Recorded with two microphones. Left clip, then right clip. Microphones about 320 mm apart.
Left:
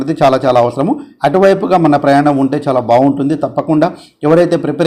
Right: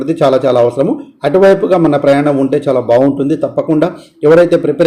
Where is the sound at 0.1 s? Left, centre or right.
Centre.